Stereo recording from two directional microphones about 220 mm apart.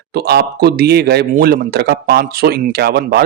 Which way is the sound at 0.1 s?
45° right (ahead or behind).